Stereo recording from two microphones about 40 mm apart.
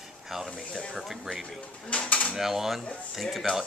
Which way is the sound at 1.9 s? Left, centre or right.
Left.